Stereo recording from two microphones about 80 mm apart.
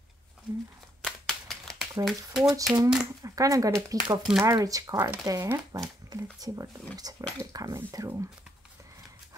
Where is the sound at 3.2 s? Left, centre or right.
Right.